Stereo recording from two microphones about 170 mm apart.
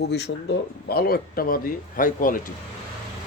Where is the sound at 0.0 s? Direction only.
80° left; by 2.5 s 55° left (ahead or behind).